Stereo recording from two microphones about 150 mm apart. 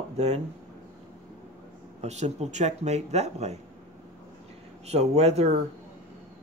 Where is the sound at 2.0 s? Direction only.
50° right (ahead or behind).